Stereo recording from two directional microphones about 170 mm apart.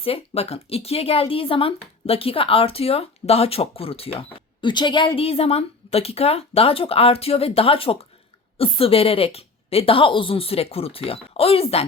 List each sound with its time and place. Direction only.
0.0 s speech: 35° left (ahead or behind)